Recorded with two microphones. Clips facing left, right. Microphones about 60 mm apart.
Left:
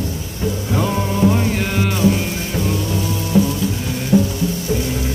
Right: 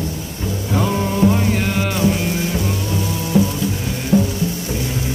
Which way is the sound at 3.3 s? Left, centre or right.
Centre.